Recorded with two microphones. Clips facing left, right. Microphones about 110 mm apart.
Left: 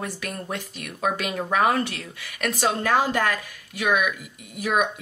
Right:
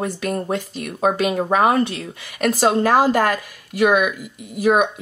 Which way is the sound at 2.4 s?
35° right (ahead or behind).